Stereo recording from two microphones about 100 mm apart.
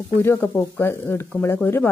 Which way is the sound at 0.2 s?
25° left (ahead or behind).